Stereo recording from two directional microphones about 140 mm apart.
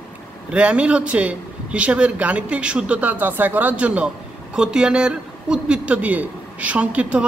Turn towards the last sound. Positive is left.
turn(degrees=-10)  # may be behind; listen again after turning